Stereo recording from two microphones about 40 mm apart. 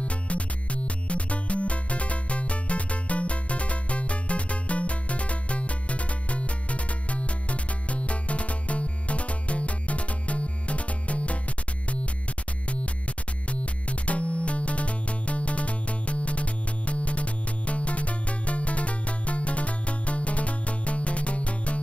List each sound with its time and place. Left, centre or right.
0.0 s music: left
13.5 s music: left